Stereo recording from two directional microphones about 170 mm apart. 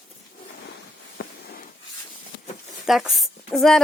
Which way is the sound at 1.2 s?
75° left (ahead or behind).